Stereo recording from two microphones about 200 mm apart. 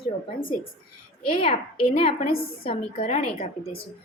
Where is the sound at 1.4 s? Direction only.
25° left (ahead or behind).